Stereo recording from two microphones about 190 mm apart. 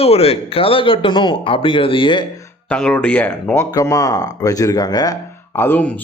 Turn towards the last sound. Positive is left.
turn(degrees=10)  # may be behind; listen again after turning